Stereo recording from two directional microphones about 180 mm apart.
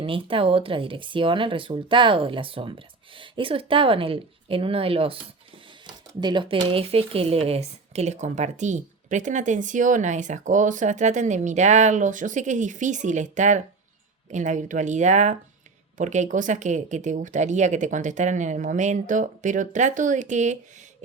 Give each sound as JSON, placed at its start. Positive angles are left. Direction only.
{"t": 0.0, "sound": "speech", "side_deg": -30}